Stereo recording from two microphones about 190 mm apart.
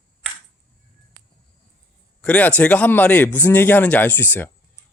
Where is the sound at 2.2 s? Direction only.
5° left (ahead or behind).